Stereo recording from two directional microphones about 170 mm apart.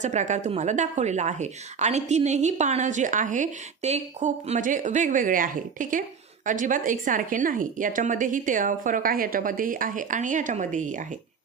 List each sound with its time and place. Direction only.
0.0 s speech: 45° right (ahead or behind)